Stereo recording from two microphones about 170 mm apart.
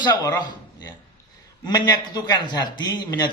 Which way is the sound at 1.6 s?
25° left (ahead or behind).